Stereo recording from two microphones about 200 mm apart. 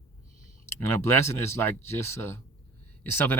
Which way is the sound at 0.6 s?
10° left (ahead or behind).